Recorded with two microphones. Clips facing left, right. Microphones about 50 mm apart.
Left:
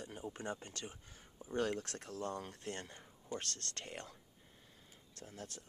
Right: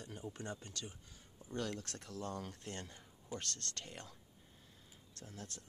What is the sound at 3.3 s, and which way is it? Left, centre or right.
Speech, left.